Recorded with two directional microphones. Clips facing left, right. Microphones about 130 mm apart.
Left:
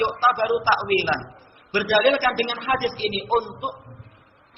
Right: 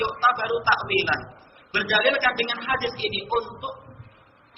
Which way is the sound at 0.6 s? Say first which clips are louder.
Left 3 dB; 30° left (ahead or behind).